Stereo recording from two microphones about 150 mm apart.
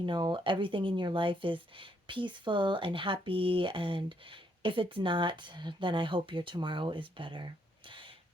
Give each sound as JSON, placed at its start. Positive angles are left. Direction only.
{"t": 0.0, "sound": "speech", "side_deg": -30}